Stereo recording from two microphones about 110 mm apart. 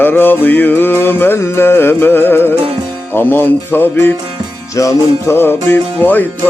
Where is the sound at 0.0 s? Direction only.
20° left (ahead or behind).